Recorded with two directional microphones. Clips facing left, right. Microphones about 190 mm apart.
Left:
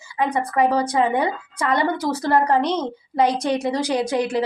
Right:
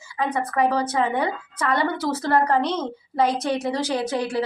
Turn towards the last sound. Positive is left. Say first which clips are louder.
# left 3 dB
turn(degrees=15)  # may be behind; listen again after turning